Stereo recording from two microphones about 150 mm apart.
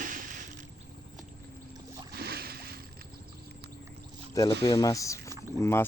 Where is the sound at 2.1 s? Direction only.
90° right.